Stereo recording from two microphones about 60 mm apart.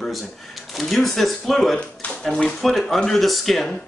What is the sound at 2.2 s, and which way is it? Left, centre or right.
Speech, centre.